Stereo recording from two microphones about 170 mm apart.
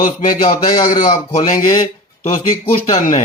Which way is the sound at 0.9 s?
50° left (ahead or behind).